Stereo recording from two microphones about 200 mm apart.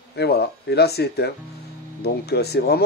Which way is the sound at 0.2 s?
55° left (ahead or behind).